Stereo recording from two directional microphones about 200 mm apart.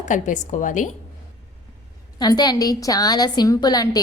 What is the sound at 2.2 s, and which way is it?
A woman's voice, 20° left (ahead or behind).